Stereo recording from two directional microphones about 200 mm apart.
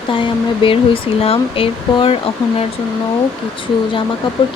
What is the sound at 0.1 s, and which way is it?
Speech, 25° left (ahead or behind).